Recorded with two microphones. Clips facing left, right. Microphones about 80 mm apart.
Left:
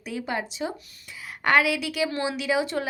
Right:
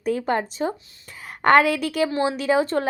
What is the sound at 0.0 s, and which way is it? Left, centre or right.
Speech, right.